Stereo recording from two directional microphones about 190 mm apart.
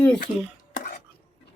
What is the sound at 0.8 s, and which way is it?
Dishes, 40° left (ahead or behind).